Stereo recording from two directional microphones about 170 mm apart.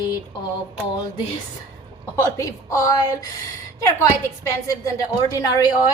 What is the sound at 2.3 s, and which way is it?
A woman's voice, 15° left (ahead or behind).